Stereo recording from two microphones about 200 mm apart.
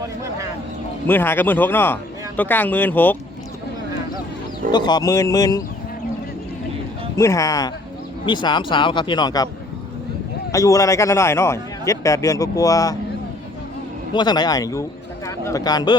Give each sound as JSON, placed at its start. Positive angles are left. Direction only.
{"t": 1.0, "sound": "a man's voice", "side_deg": 10}
{"t": 4.7, "sound": "a man's voice", "side_deg": 20}
{"t": 7.2, "sound": "a man's voice", "side_deg": 15}
{"t": 10.5, "sound": "a man's voice", "side_deg": 15}
{"t": 14.1, "sound": "speech", "side_deg": 20}